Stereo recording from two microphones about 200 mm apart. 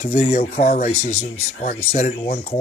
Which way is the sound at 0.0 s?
40° left (ahead or behind).